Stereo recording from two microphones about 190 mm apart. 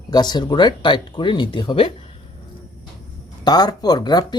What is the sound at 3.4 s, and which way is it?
Speech, 20° left (ahead or behind).